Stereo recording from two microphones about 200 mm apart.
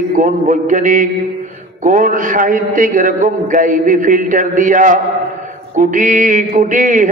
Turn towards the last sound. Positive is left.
turn(degrees=-40)  # may be behind; listen again after turning